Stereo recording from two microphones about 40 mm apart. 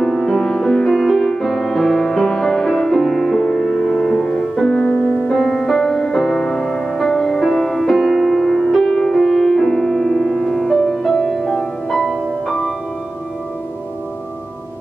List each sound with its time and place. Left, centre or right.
0.0 s music: centre
4.6 s music: left
5.4 s music: centre